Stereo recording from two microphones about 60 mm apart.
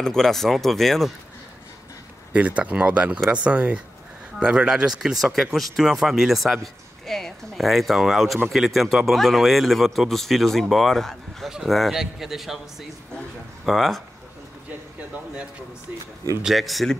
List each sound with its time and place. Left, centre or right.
0.0 s speech: centre
2.3 s speech: right
5.1 s speech: centre
13.7 s speech: centre
16.4 s speech: centre